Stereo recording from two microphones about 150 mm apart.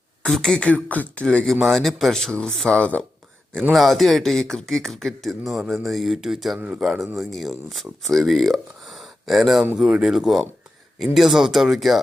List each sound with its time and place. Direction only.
0.2 s speech: 5° left (ahead or behind)